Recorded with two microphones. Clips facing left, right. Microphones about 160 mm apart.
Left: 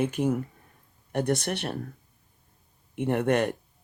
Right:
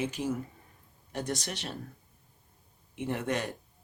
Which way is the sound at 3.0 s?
60° left (ahead or behind).